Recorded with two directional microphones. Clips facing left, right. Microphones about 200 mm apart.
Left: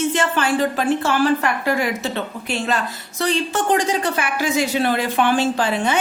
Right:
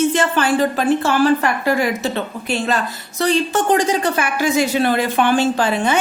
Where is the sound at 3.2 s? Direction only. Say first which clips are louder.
Right 3 dB; 40° right (ahead or behind).